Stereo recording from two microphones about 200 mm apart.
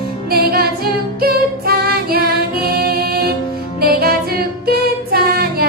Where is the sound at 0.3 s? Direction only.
50° right (ahead or behind).